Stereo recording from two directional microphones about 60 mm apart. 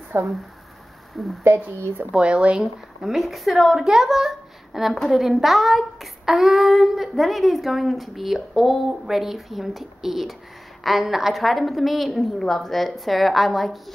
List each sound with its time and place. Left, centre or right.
0.1 s speech: right
1.4 s speech: right
2.1 s speech: centre
3.0 s speech: centre